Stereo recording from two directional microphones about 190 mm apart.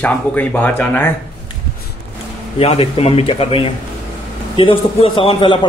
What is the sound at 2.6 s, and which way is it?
A man's voice, 30° left (ahead or behind).